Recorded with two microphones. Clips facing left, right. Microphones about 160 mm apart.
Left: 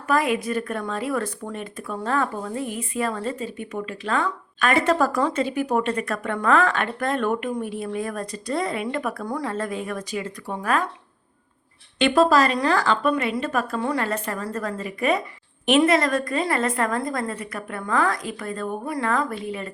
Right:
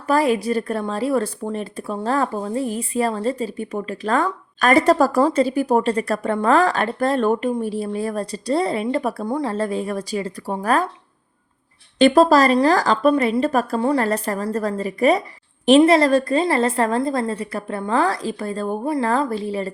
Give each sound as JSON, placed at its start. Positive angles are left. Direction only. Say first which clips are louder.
{"t": 0.1, "sound": "a woman's voice", "louder": "right 4 dB", "side_deg": -35}
{"t": 11.9, "sound": "a woman's voice", "louder": "right 5 dB", "side_deg": -40}